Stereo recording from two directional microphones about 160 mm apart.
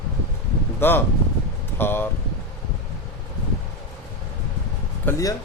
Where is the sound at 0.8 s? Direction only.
15° left (ahead or behind).